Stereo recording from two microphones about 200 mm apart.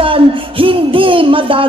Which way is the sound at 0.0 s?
25° right (ahead or behind).